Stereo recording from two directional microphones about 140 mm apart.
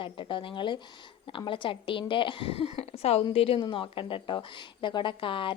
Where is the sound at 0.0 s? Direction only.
35° left (ahead or behind).